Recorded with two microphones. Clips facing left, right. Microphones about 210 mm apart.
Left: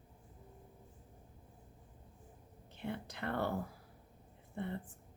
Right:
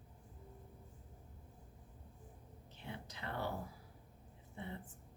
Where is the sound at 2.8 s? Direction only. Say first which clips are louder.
Left 7 dB; 60° left (ahead or behind).